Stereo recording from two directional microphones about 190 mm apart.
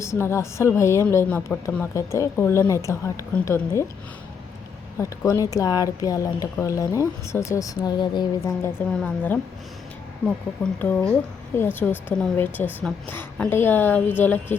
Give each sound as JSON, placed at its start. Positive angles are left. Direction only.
{"t": 0.0, "sound": "speech", "side_deg": 15}
{"t": 4.9, "sound": "speech", "side_deg": 15}
{"t": 8.9, "sound": "speech", "side_deg": 5}